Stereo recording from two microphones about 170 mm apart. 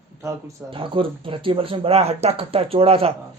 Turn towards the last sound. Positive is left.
turn(degrees=-35)  # may be behind; listen again after turning